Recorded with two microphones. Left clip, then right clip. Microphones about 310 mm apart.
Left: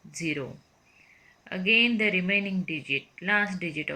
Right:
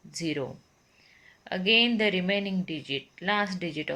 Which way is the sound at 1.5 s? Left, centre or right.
Right.